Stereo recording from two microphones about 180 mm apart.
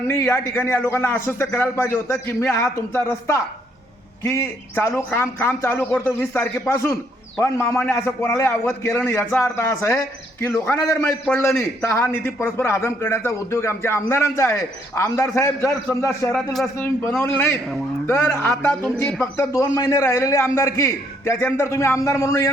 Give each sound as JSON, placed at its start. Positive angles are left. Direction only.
{"t": 0.1, "sound": "a man's voice", "side_deg": 10}
{"t": 16.3, "sound": "a man's voice", "side_deg": 0}